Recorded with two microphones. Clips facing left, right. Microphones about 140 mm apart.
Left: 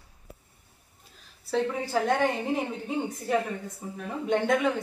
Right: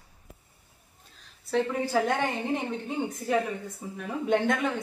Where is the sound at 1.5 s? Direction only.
Centre (ahead or behind).